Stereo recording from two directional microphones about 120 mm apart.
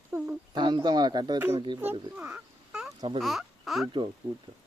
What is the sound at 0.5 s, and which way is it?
Speech, 40° right (ahead or behind).